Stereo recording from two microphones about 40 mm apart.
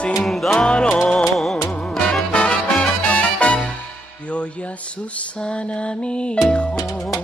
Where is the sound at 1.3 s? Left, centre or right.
Centre.